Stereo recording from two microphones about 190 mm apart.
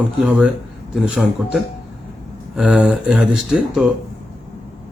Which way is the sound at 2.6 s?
5° right (ahead or behind).